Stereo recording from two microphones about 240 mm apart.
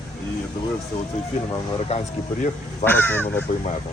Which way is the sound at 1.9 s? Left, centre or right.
Left.